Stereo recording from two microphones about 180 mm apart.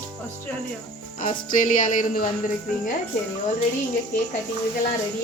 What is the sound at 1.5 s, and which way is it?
Speech, 45° left (ahead or behind).